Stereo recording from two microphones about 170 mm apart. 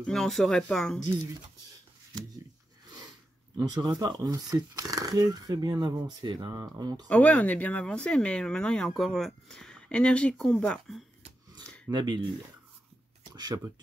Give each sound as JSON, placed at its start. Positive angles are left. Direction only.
{"t": 0.0, "sound": "speech", "side_deg": 5}
{"t": 3.5, "sound": "speech", "side_deg": -20}
{"t": 7.1, "sound": "speech", "side_deg": 10}
{"t": 11.9, "sound": "speech", "side_deg": -25}